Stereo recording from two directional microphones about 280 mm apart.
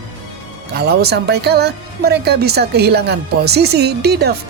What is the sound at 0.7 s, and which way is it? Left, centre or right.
Speech, right.